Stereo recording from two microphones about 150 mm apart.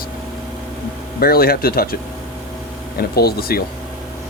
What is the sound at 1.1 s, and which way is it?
Speech, 90° left.